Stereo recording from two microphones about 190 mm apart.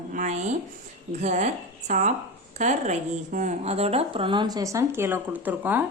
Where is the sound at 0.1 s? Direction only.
40° right (ahead or behind); by 5.8 s 10° right (ahead or behind).